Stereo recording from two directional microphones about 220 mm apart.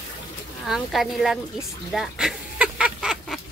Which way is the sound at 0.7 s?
Centre (ahead or behind).